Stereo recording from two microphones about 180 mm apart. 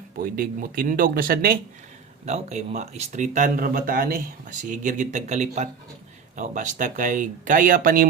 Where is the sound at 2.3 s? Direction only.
40° right (ahead or behind).